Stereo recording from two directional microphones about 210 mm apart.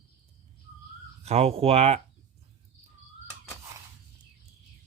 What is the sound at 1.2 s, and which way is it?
Speech, 30° right (ahead or behind).